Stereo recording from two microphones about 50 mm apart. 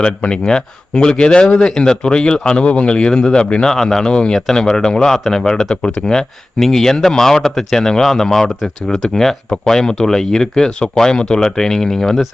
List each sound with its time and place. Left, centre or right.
0.2 s speech: centre
6.1 s speech: centre